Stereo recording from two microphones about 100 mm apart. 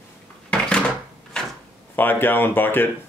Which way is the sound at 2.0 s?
20° left (ahead or behind).